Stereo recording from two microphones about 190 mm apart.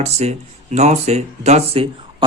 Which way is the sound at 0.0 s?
35° right (ahead or behind).